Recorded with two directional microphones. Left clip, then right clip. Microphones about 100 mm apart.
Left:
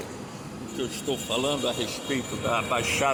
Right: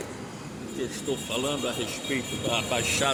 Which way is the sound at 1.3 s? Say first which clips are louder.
Left 4 dB; 5° left (ahead or behind).